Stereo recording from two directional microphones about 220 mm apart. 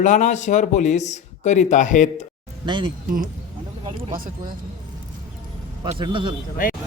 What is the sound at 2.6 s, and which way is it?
Speech, 20° right (ahead or behind).